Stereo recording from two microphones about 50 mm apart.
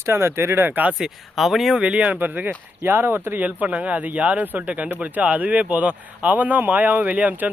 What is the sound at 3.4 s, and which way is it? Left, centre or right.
Speech, right.